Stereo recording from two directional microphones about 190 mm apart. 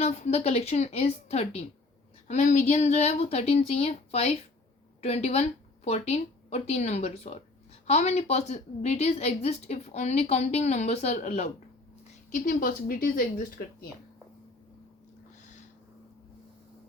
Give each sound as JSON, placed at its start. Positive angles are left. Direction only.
{"t": 0.0, "sound": "a woman's voice", "side_deg": 35}
{"t": 12.3, "sound": "speech", "side_deg": 45}